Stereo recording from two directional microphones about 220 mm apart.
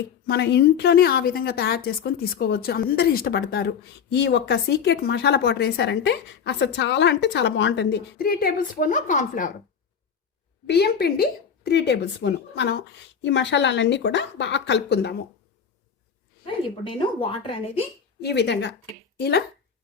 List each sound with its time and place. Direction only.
0.3 s a woman's voice: 50° left (ahead or behind)
10.7 s a woman's voice: 50° left (ahead or behind)
17.2 s a woman's voice: 25° left (ahead or behind)
18.2 s a woman's voice: 50° left (ahead or behind)